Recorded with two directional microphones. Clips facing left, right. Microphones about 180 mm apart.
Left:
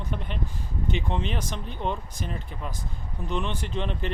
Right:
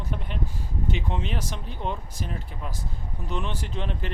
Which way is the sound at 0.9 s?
5° right (ahead or behind).